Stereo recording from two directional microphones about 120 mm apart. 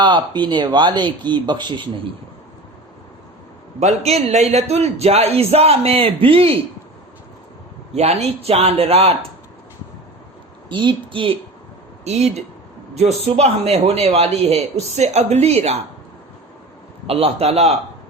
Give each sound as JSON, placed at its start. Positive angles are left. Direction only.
{"t": 0.0, "sound": "speech", "side_deg": -40}
{"t": 3.8, "sound": "a man's voice", "side_deg": -65}
{"t": 4.5, "sound": "a man's voice", "side_deg": -60}
{"t": 7.9, "sound": "a man's voice", "side_deg": -60}
{"t": 10.7, "sound": "a woman's voice", "side_deg": -40}
{"t": 12.0, "sound": "a man's voice", "side_deg": -65}
{"t": 17.1, "sound": "a man's voice", "side_deg": -55}